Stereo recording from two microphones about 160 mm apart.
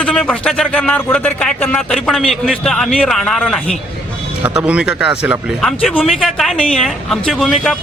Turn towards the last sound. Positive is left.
turn(degrees=0)  # may be behind; listen again after turning